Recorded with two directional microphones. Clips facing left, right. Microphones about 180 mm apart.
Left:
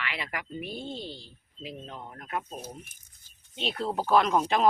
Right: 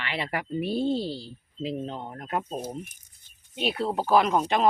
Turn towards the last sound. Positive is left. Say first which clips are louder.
# right 1 dB
turn(degrees=0)  # may be behind; listen again after turning